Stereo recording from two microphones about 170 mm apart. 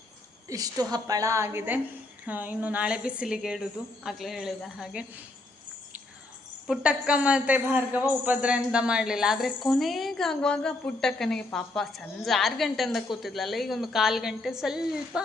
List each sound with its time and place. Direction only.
0.4 s a woman's voice: 20° right (ahead or behind); by 5.2 s 5° right (ahead or behind)
6.7 s speech: 5° right (ahead or behind)